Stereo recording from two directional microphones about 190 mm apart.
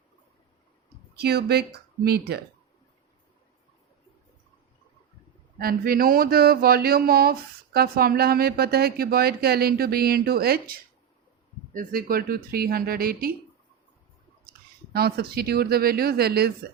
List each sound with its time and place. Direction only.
1.1 s speech: 55° right (ahead or behind)
5.5 s speech: 50° right (ahead or behind)
14.9 s speech: 55° right (ahead or behind)